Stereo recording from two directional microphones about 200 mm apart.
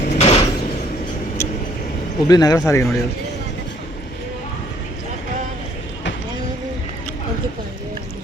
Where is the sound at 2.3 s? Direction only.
20° left (ahead or behind).